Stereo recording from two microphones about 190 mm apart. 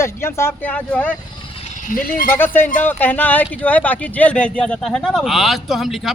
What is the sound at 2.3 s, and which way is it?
A man's voice, 10° left (ahead or behind).